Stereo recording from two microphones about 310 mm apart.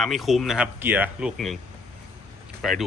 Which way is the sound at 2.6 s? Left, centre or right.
Centre.